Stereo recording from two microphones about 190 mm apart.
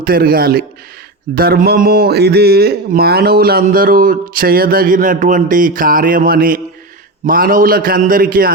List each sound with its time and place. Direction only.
0.0 s speech: 50° right (ahead or behind)